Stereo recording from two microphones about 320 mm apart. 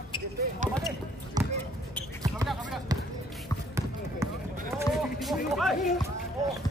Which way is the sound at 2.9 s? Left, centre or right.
Centre.